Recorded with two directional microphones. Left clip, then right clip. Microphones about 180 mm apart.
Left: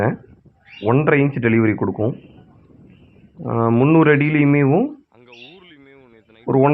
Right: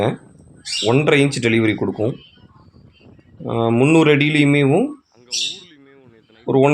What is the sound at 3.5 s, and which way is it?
Speech, 30° right (ahead or behind).